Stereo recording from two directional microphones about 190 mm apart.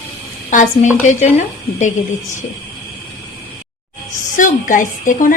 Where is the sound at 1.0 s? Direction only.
40° left (ahead or behind).